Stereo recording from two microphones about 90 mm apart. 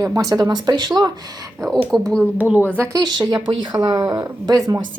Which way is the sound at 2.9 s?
50° right (ahead or behind).